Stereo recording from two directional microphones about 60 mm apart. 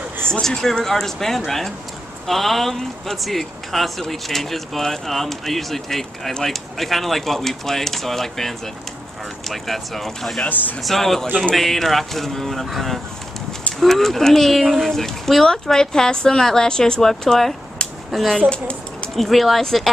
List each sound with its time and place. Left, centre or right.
0.3 s speech: centre
10.4 s speech: left
10.8 s speech: centre
17.8 s a sound: centre
18.1 s speech: centre